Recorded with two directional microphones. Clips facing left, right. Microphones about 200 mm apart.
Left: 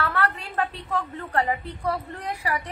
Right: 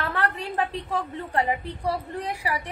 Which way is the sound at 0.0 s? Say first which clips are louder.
Left 1 dB; 15° right (ahead or behind).